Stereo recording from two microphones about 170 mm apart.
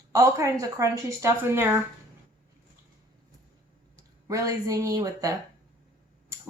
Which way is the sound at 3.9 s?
20° right (ahead or behind).